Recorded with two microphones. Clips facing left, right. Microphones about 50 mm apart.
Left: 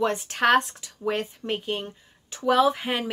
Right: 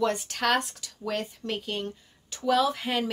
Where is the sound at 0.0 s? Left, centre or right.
Left.